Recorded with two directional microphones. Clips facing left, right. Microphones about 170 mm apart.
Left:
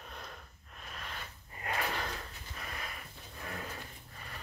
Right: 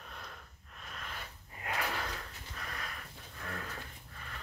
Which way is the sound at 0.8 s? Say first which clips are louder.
Left 1 dB; centre (ahead or behind).